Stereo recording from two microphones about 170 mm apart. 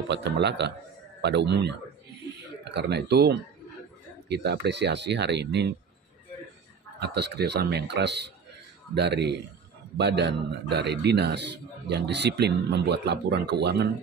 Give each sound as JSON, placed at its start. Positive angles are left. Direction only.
{"t": 0.1, "sound": "a man's voice", "side_deg": -90}
{"t": 7.0, "sound": "a man's voice", "side_deg": -80}